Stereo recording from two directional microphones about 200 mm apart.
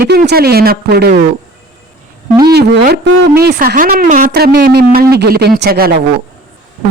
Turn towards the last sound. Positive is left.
turn(degrees=-50)  # may be behind; listen again after turning